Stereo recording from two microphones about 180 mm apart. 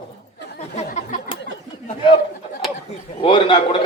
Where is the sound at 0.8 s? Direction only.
35° left (ahead or behind).